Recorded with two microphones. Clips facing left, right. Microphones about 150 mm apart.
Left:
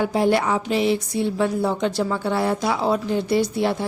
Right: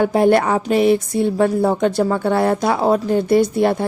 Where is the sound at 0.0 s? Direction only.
55° right (ahead or behind).